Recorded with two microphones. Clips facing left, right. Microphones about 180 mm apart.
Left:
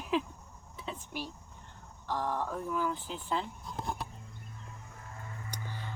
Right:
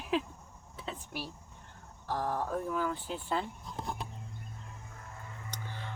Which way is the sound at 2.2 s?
35° right (ahead or behind).